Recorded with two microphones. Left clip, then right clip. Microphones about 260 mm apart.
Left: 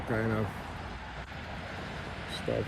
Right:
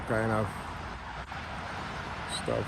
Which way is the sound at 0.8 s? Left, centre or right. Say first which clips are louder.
Right 2 dB; right.